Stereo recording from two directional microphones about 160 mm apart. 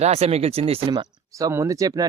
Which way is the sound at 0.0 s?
40° right (ahead or behind).